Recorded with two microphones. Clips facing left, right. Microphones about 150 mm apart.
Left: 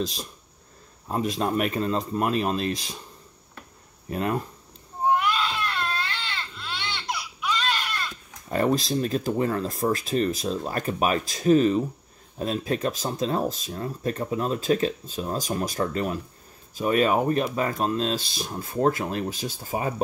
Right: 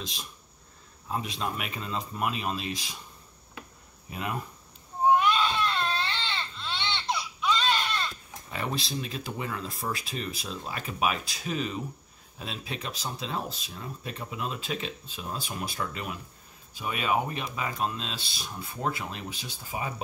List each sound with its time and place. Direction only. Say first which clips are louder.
1.0 s speech: left 6 dB; 45° left (ahead or behind)
5.1 s baby cry: right 1 dB; 20° right (ahead or behind)
8.5 s speech: left 10 dB; 45° left (ahead or behind)